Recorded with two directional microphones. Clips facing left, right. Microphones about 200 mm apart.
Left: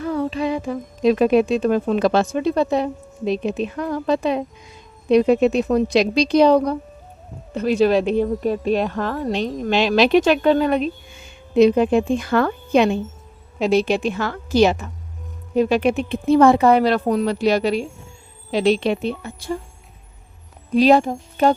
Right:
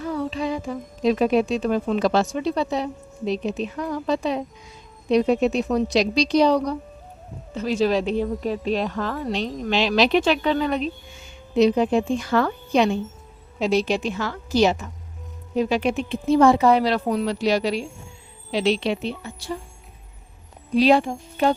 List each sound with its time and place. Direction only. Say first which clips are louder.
0.0 s speech: left 4 dB; 60° left (ahead or behind)
20.7 s speech: left 3 dB; 45° left (ahead or behind)